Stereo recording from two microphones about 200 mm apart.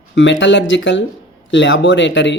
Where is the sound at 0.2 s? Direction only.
65° left (ahead or behind).